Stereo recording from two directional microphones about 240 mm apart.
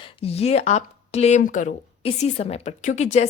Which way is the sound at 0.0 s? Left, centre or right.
Left.